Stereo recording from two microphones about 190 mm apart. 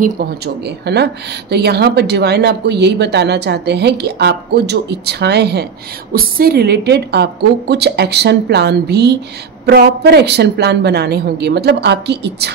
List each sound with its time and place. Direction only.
0.8 s a woman's voice: 60° right (ahead or behind)